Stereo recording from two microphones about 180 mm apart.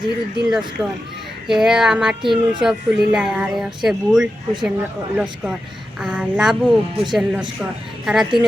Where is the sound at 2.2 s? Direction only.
25° right (ahead or behind).